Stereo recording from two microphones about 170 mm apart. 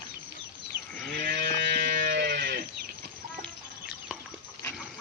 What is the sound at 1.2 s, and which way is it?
Sheep, 65° right (ahead or behind).